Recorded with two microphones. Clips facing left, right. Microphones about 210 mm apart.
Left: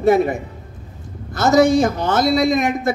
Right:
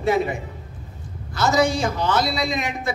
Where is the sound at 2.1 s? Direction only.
45° left (ahead or behind).